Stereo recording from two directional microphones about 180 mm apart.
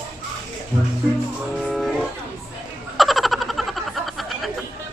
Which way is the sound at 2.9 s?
Centre (ahead or behind).